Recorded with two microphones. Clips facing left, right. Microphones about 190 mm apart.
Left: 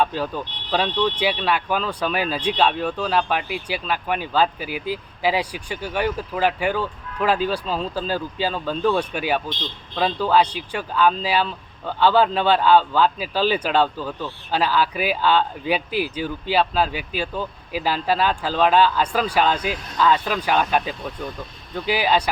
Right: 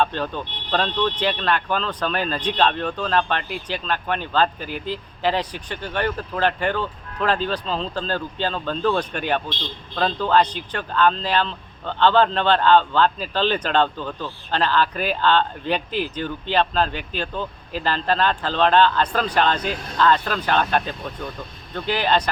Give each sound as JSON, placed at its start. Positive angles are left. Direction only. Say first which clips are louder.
{"t": 0.0, "sound": "speech", "louder": "even", "side_deg": 10}